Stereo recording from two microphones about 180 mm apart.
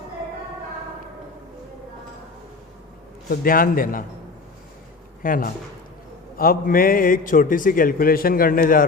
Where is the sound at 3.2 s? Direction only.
50° left (ahead or behind).